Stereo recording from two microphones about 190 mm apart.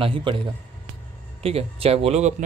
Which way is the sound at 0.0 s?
25° right (ahead or behind).